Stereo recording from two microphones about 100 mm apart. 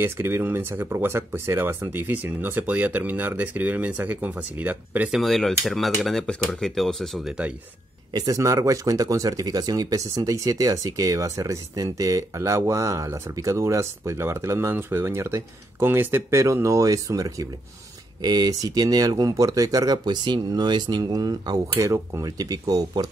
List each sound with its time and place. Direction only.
0.0 s speech: 20° right (ahead or behind)
5.1 s dishes: centre (ahead or behind)
8.1 s speech: 35° right (ahead or behind)
21.7 s speech: 30° right (ahead or behind)